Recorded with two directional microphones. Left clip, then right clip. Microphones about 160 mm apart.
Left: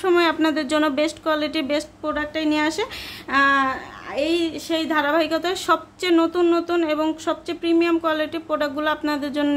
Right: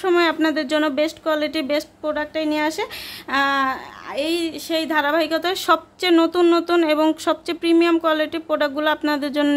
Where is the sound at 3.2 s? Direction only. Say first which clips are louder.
Left 1 dB; 30° right (ahead or behind).